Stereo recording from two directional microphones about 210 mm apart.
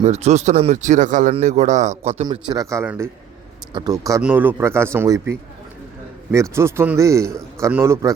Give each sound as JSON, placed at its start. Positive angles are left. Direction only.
{"t": 0.0, "sound": "a man's voice", "side_deg": -30}
{"t": 2.2, "sound": "speech", "side_deg": -20}